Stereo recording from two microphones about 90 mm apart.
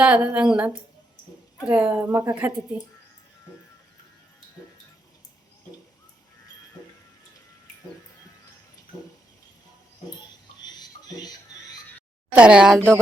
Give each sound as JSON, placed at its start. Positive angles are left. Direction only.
{"t": 0.0, "sound": "a woman's voice", "side_deg": -10}
{"t": 10.6, "sound": "a sound", "side_deg": 50}
{"t": 12.3, "sound": "a woman's voice", "side_deg": -10}